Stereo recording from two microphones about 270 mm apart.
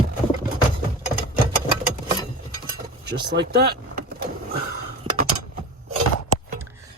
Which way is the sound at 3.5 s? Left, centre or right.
Right.